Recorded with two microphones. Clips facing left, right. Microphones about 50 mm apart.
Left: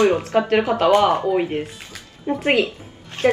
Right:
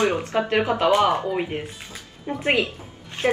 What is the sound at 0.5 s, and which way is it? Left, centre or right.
A woman's voice, centre.